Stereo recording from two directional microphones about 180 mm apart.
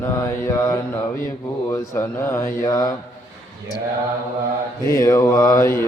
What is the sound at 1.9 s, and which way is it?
Speech, 20° left (ahead or behind).